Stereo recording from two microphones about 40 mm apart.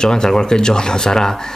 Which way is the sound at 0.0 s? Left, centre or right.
Centre.